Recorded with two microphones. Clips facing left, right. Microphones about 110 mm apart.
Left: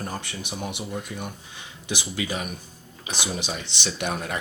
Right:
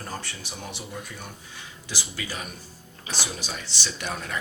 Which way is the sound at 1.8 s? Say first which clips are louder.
Left 7 dB; 20° left (ahead or behind).